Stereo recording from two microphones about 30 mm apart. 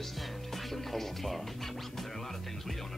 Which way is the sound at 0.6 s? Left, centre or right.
Centre.